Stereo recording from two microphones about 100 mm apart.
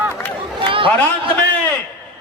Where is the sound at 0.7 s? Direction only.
60° right (ahead or behind).